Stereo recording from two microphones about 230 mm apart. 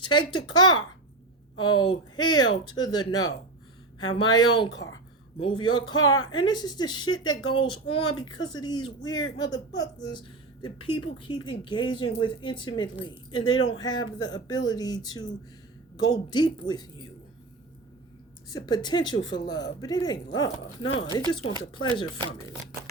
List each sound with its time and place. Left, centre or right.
0.0 s speech: centre
18.4 s speech: centre
22.2 s speech: centre